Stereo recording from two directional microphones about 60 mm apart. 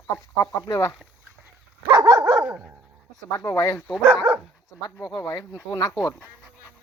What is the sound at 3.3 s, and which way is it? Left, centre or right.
Speech, left.